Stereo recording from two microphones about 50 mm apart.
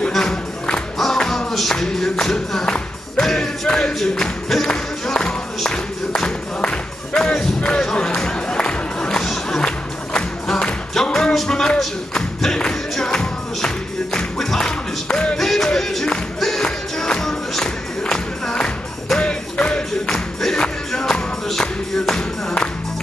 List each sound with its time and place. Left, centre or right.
0.1 s music: centre
15.0 s music: centre
15.3 s music: centre